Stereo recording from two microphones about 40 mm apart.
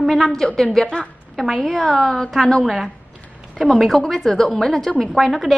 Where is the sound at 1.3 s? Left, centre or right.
Centre.